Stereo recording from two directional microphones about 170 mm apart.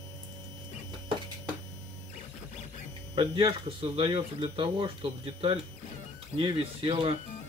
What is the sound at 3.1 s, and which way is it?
Speech, 30° right (ahead or behind).